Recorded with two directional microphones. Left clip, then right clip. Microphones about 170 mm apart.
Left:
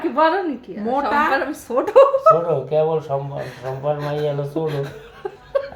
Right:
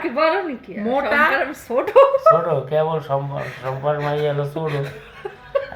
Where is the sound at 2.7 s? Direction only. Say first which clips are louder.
Left 1 dB; 10° right (ahead or behind).